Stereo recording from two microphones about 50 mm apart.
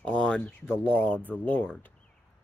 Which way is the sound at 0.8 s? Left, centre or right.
Left.